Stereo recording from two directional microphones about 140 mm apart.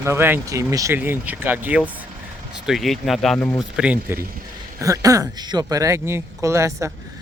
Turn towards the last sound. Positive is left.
turn(degrees=-20)  # may be behind; listen again after turning